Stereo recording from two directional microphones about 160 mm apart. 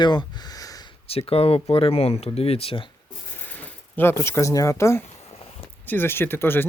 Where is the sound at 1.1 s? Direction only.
40° left (ahead or behind).